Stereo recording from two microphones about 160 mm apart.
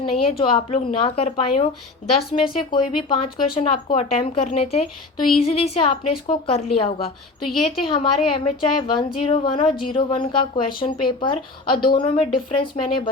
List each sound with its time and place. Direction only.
0.3 s speech: 35° left (ahead or behind)